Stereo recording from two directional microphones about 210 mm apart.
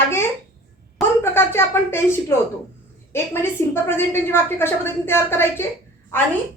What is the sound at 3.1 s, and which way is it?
A woman's voice, 10° left (ahead or behind).